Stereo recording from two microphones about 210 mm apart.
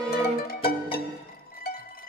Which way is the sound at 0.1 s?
45° left (ahead or behind).